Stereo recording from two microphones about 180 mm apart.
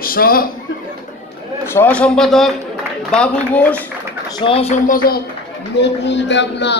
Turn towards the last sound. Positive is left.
turn(degrees=75)  # may be behind; listen again after turning